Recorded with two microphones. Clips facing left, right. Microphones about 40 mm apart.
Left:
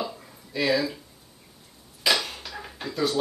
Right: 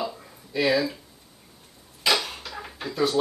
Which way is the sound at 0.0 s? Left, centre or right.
Centre.